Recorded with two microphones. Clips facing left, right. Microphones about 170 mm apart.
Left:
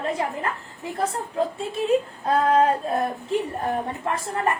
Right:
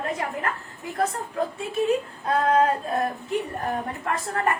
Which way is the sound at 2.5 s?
30° left (ahead or behind).